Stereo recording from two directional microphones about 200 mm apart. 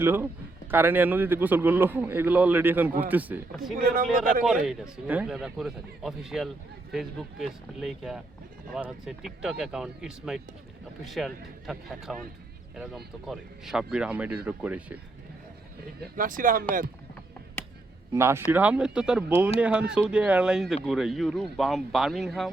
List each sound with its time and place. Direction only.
0.0 s a man's voice: 10° right (ahead or behind)
3.8 s speech: 45° right (ahead or behind)
4.6 s a man's voice: 5° right (ahead or behind)
16.1 s speech: 45° right (ahead or behind)
18.1 s a man's voice: 15° right (ahead or behind)